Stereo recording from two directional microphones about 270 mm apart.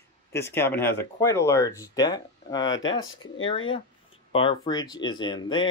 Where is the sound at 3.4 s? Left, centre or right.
Centre.